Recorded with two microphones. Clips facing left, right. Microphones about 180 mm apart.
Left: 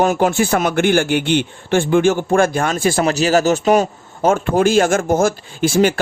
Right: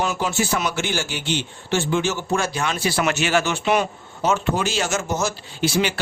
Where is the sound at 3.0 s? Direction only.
35° left (ahead or behind).